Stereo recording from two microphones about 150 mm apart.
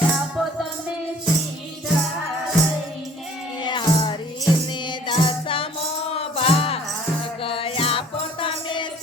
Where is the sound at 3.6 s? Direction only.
30° left (ahead or behind).